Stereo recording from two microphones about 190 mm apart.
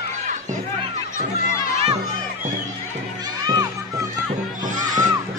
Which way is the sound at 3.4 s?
20° right (ahead or behind).